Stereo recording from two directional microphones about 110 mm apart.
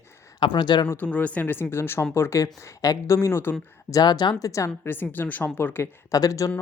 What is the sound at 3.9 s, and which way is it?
Speech, 35° left (ahead or behind).